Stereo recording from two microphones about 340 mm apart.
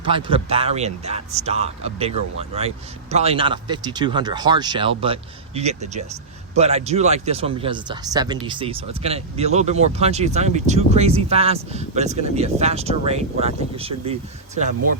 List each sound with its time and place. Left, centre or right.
0.1 s speech: centre